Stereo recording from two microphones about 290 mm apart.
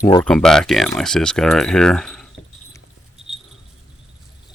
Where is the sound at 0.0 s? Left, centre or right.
Centre.